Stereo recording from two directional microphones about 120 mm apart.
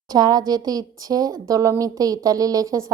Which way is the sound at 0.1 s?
35° right (ahead or behind).